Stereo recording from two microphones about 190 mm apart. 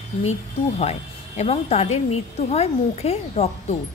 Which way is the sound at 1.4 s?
35° left (ahead or behind).